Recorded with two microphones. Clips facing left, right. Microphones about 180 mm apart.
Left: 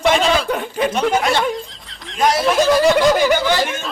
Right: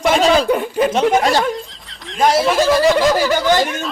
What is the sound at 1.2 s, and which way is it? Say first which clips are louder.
Speech: right 3 dB; 35° right (ahead or behind).